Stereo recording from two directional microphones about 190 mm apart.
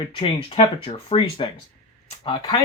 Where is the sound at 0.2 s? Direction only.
30° left (ahead or behind).